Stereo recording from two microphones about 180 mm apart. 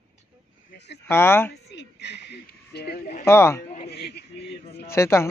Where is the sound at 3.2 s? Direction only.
15° left (ahead or behind).